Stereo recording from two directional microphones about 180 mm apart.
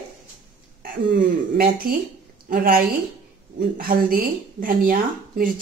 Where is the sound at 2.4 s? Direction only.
55° right (ahead or behind).